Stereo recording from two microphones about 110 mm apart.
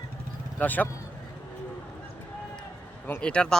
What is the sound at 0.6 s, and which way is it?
Speech, 15° left (ahead or behind).